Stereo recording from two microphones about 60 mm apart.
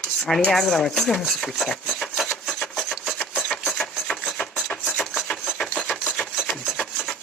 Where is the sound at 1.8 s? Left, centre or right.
Centre.